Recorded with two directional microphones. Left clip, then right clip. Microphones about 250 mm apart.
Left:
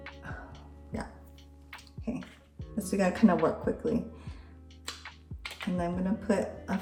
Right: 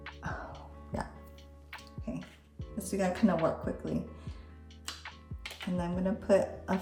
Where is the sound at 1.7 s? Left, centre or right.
Centre.